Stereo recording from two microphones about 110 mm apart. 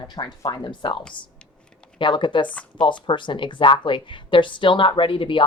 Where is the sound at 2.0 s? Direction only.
45° left (ahead or behind).